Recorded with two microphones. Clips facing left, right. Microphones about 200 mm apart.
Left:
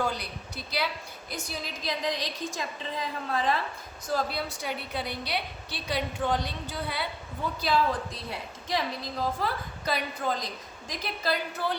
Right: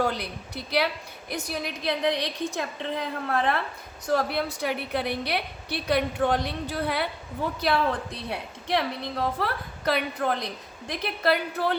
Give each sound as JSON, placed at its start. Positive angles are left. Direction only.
{"t": 0.0, "sound": "a woman's voice", "side_deg": -60}